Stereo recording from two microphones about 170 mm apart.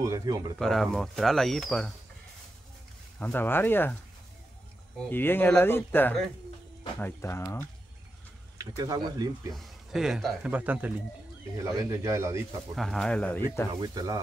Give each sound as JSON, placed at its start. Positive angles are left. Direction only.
{"t": 0.0, "sound": "speech", "side_deg": -20}
{"t": 0.6, "sound": "speech", "side_deg": 0}
{"t": 3.2, "sound": "speech", "side_deg": 10}
{"t": 5.1, "sound": "speech", "side_deg": 10}
{"t": 8.5, "sound": "speech", "side_deg": -20}
{"t": 9.5, "sound": "speech", "side_deg": 0}
{"t": 12.7, "sound": "speech", "side_deg": 0}
{"t": 13.7, "sound": "speech", "side_deg": -20}